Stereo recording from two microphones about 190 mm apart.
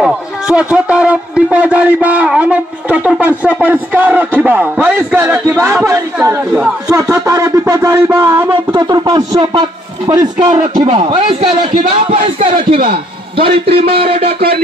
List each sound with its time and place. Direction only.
0.0 s a man's voice: 5° right (ahead or behind); by 14.3 s 30° right (ahead or behind)